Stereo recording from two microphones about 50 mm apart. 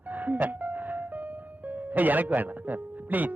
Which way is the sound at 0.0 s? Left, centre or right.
Right.